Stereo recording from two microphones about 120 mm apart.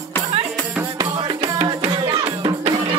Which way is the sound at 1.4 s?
55° right (ahead or behind).